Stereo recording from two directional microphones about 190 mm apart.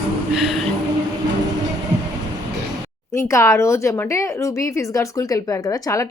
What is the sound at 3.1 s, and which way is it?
A woman's voice, 15° left (ahead or behind).